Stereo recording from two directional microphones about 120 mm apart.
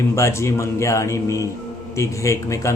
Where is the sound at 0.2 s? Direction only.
25° left (ahead or behind).